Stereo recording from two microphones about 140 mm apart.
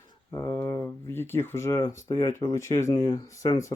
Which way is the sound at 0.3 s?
20° left (ahead or behind).